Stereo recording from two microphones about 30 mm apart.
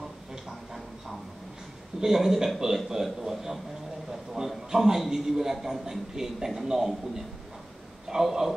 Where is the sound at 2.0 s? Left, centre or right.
Centre.